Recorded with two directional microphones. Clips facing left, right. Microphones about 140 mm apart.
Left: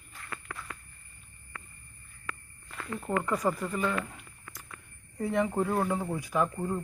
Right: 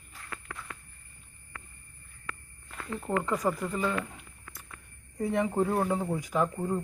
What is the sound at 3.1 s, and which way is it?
Speech, 20° right (ahead or behind).